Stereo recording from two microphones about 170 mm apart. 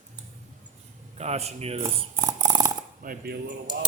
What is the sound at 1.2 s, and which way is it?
Speech, 40° right (ahead or behind).